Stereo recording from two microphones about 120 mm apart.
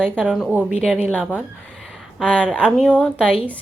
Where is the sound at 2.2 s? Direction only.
10° left (ahead or behind).